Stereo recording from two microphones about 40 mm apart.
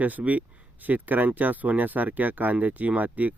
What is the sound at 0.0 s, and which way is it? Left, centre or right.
Speech, right.